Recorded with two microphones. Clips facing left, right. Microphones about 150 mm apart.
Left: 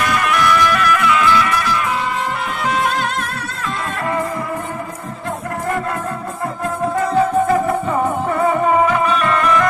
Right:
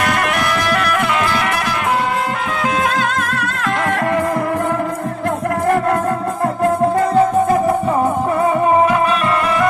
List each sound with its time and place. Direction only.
0.0 s music: 60° right (ahead or behind)
3.2 s music: 90° right